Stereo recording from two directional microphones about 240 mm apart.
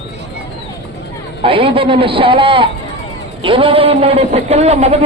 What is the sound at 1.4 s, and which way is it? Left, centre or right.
Speech, right.